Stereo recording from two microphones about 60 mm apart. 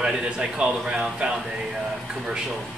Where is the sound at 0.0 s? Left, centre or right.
Centre.